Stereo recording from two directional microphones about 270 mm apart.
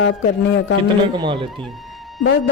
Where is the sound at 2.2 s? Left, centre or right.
Left.